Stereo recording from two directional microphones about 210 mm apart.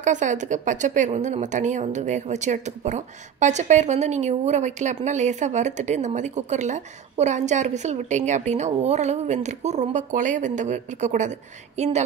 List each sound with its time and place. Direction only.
0.0 s a woman's voice: 35° right (ahead or behind)